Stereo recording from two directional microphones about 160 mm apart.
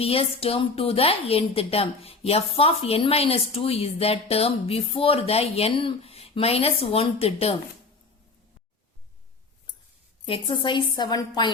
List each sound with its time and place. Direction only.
0.0 s a woman's voice: 35° left (ahead or behind)
10.2 s a woman's voice: 35° left (ahead or behind)